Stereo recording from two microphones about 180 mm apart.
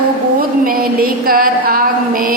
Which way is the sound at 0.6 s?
55° right (ahead or behind).